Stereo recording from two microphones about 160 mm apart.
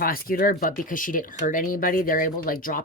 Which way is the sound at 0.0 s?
65° left (ahead or behind).